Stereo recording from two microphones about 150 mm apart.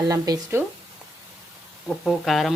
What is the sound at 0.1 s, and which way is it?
Speech, 25° right (ahead or behind).